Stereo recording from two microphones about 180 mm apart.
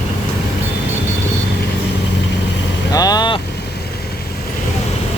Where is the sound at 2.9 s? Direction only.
20° left (ahead or behind).